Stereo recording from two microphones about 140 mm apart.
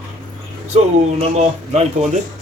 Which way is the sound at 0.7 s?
50° right (ahead or behind).